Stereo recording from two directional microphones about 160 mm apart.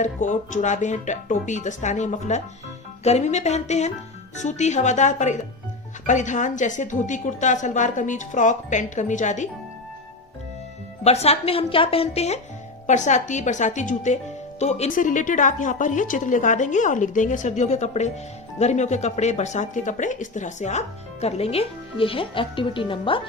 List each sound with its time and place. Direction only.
0.0 s speech: 50° left (ahead or behind)
11.0 s a woman's voice: 40° left (ahead or behind)